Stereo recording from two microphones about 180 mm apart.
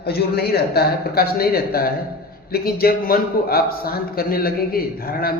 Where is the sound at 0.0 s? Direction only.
60° left (ahead or behind).